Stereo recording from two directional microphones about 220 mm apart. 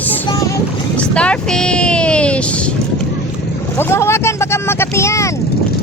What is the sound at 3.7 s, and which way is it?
Speech, 10° left (ahead or behind).